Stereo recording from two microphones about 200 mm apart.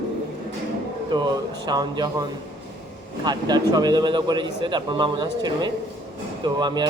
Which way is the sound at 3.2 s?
20° right (ahead or behind).